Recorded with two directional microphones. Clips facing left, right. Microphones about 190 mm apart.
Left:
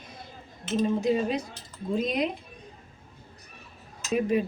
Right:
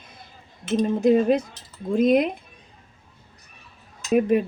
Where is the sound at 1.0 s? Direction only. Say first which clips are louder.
Right 8 dB; 50° right (ahead or behind).